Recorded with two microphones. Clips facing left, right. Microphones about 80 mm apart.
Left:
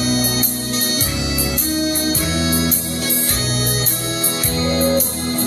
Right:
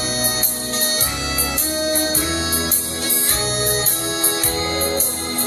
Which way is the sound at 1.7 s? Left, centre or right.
Right.